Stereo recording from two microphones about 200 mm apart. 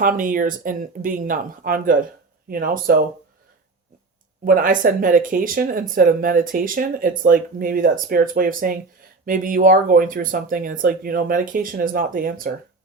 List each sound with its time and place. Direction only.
0.0 s speech: 45° right (ahead or behind)
4.4 s speech: 45° right (ahead or behind)